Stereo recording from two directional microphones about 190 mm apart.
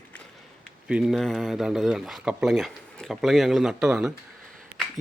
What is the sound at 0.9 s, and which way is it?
Speech, 5° right (ahead or behind).